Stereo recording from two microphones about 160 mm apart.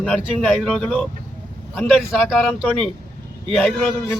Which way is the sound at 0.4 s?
Centre (ahead or behind).